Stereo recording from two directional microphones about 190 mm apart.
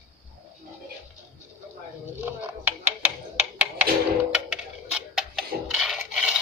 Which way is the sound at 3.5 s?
5° right (ahead or behind).